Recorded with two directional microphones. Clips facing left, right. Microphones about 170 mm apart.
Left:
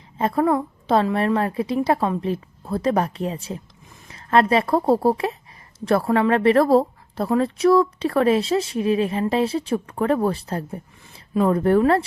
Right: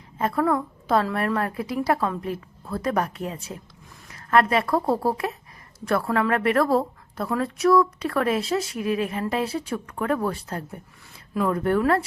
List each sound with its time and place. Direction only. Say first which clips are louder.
0.2 s speech: left 3 dB; 30° left (ahead or behind)